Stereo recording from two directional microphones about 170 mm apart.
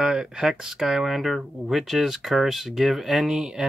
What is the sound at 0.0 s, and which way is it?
Speech, 5° right (ahead or behind).